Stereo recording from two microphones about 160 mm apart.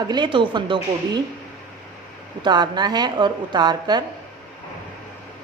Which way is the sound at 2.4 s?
25° right (ahead or behind).